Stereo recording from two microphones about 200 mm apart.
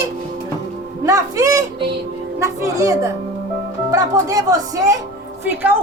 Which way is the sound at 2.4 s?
15° right (ahead or behind).